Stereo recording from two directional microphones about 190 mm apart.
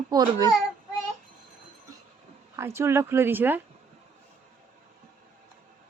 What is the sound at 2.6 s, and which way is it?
Speech, 15° right (ahead or behind).